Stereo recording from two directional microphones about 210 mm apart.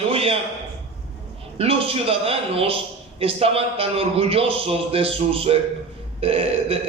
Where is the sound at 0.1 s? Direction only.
25° right (ahead or behind).